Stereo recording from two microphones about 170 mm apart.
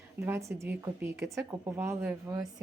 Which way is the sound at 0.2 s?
15° right (ahead or behind).